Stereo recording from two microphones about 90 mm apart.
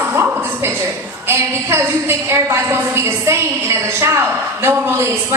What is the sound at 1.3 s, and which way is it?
A woman's voice, 25° right (ahead or behind).